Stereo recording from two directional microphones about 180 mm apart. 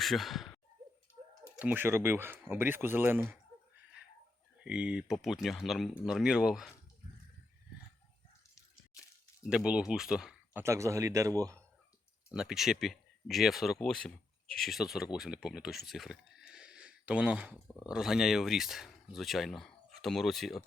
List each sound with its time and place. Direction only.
0.0 s speech: centre (ahead or behind)
4.6 s speech: 5° right (ahead or behind)
9.4 s speech: 5° right (ahead or behind)
12.3 s speech: 5° right (ahead or behind)